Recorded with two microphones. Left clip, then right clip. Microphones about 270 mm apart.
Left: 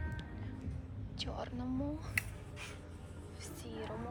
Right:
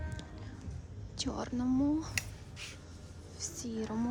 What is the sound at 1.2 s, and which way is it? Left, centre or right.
Speech, right.